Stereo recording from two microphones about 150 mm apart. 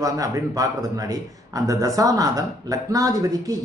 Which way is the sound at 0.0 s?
25° right (ahead or behind).